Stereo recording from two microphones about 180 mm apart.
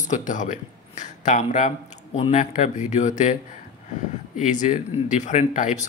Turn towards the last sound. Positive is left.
turn(degrees=40)  # may be behind; listen again after turning